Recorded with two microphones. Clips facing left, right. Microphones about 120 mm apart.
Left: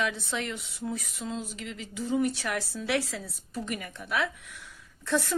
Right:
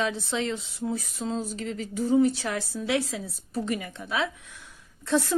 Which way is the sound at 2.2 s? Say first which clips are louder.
Right 5 dB; 25° right (ahead or behind).